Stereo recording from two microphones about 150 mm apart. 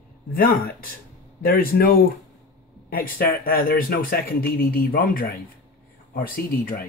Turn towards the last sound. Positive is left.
turn(degrees=75)  # may be behind; listen again after turning